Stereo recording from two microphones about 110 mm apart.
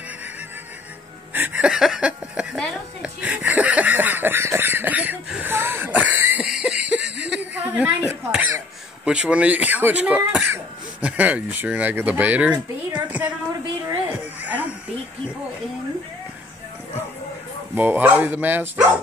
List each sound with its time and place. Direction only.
1.3 s speech: 15° right (ahead or behind)
3.0 s a sound: 15° right (ahead or behind)
6.4 s a sound: 5° right (ahead or behind)
9.0 s speech: 10° right (ahead or behind)
14.4 s music: 15° right (ahead or behind)
17.7 s speech: 15° right (ahead or behind)